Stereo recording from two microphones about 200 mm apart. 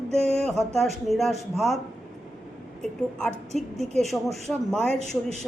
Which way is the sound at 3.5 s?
Centre (ahead or behind).